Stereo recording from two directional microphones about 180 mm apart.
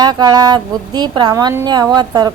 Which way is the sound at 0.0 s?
20° right (ahead or behind).